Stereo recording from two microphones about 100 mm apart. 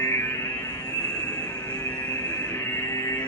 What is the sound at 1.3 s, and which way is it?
Music, 40° left (ahead or behind).